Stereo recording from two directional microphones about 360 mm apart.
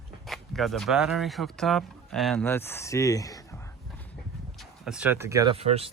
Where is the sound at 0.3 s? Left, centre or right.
Centre.